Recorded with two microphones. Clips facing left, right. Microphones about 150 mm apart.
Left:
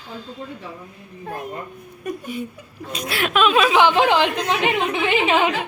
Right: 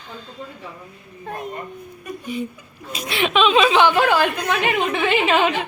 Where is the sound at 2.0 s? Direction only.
50° left (ahead or behind).